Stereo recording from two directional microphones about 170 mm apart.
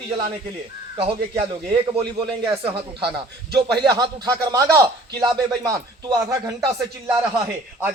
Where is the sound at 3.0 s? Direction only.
75° right (ahead or behind).